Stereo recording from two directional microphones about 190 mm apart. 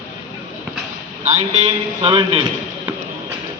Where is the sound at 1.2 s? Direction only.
35° right (ahead or behind).